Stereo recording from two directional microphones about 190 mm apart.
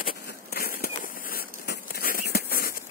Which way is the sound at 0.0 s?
50° left (ahead or behind).